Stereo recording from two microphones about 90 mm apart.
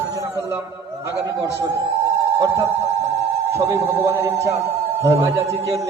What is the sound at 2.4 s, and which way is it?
A man's voice, 30° right (ahead or behind).